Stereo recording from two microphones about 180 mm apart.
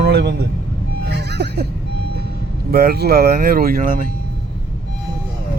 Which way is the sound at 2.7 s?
55° right (ahead or behind).